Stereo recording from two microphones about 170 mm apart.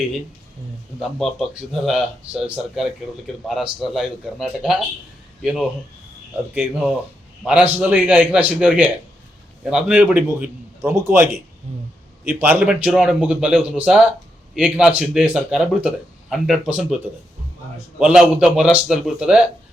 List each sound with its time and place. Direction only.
0.9 s speech: centre (ahead or behind)
6.5 s a man's voice: 5° right (ahead or behind)
11.7 s a sound: 40° right (ahead or behind)
12.2 s speech: 10° right (ahead or behind)